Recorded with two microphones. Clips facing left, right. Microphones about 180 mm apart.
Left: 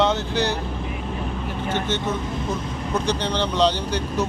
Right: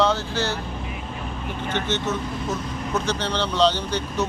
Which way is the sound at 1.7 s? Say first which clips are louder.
Even; 10° left (ahead or behind).